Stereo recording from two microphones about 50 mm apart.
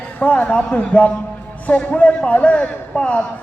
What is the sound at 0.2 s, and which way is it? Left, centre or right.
A man's voice, left.